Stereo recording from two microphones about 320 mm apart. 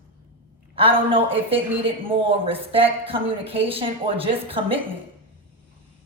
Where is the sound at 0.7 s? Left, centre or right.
Centre.